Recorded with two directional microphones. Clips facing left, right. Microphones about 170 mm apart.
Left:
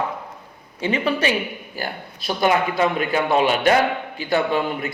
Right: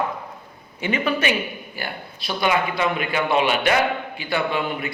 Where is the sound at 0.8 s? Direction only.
30° left (ahead or behind).